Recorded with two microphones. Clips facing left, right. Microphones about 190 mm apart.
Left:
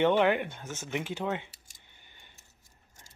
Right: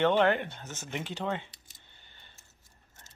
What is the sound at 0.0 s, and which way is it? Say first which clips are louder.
Speech: left 1 dB; 10° left (ahead or behind).